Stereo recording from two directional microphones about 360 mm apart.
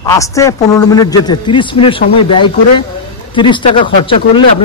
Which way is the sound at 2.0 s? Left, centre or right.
Left.